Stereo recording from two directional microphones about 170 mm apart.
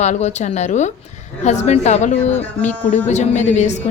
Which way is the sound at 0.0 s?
40° left (ahead or behind).